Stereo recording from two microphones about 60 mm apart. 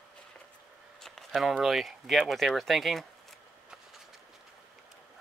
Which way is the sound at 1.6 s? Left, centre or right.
Centre.